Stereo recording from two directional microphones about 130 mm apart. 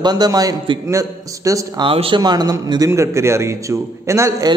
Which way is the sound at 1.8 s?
40° right (ahead or behind).